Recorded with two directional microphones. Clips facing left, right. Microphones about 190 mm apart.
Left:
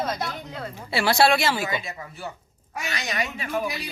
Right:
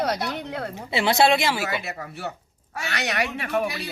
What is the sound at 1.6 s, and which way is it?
Speech, 70° right (ahead or behind).